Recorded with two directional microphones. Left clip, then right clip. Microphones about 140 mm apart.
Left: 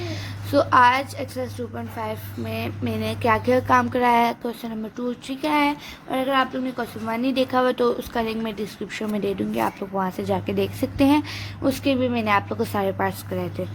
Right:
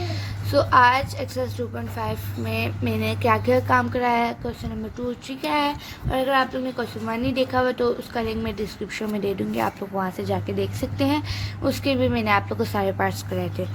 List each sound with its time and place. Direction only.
0.0 s a woman's voice: 20° left (ahead or behind)
1.4 s speech: centre (ahead or behind)